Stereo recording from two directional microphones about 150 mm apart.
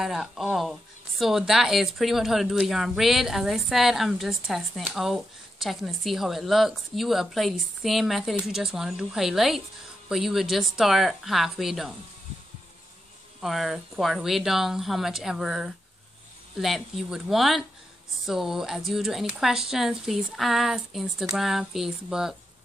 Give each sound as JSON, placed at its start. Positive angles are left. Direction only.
{"t": 0.0, "sound": "speech", "side_deg": 0}
{"t": 13.4, "sound": "speech", "side_deg": 0}